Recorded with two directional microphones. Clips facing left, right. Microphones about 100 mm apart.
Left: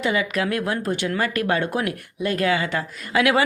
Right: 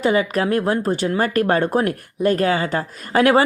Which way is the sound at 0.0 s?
40° right (ahead or behind).